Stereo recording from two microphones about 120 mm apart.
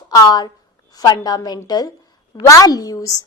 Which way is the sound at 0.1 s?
35° left (ahead or behind).